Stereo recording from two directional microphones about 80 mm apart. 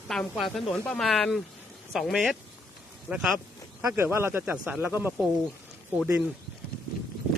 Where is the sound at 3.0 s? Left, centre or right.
Centre.